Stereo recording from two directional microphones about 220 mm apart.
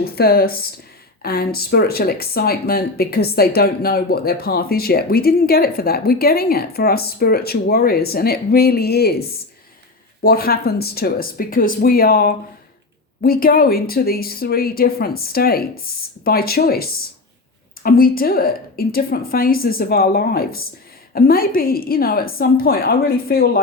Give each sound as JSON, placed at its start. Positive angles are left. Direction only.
{"t": 0.0, "sound": "speech", "side_deg": 45}